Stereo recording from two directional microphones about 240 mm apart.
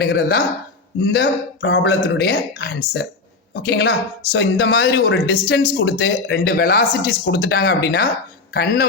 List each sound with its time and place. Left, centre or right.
0.0 s speech: left